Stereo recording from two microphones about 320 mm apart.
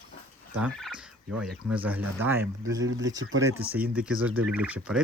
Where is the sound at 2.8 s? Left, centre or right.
Right.